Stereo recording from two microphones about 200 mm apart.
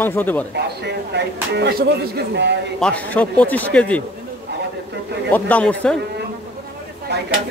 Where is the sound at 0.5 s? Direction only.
55° right (ahead or behind).